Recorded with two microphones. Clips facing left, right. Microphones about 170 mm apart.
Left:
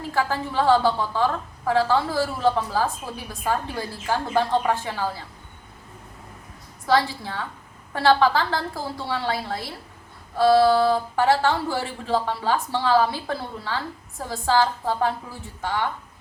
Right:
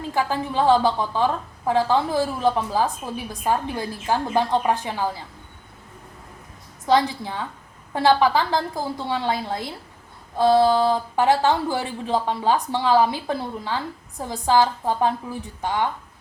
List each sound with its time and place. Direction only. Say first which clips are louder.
0.1 s speech: right 1 dB; 15° right (ahead or behind)
6.8 s a woman's voice: right 2 dB; 20° right (ahead or behind)